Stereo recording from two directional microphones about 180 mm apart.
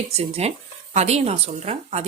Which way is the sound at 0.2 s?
35° right (ahead or behind).